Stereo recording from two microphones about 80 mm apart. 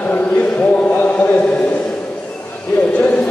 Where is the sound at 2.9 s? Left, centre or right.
Centre.